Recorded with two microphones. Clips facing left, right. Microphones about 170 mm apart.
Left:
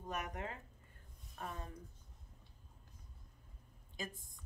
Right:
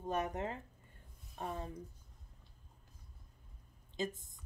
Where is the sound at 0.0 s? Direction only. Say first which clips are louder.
Right 6 dB; 25° right (ahead or behind).